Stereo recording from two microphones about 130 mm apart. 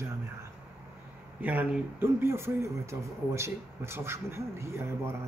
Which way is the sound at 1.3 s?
10° right (ahead or behind).